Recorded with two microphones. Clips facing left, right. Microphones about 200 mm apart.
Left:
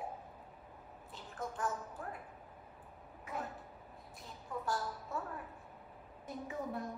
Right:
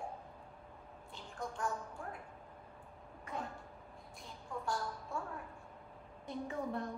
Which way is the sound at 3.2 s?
5° left (ahead or behind).